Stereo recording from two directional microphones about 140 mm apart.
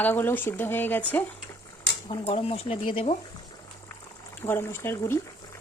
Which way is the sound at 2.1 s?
45° left (ahead or behind).